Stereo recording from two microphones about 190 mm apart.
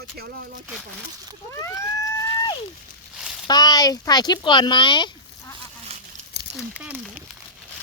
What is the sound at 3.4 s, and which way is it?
Speech, 20° left (ahead or behind).